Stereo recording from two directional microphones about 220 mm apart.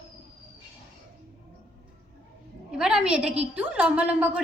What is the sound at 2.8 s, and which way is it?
A woman's voice, 5° right (ahead or behind).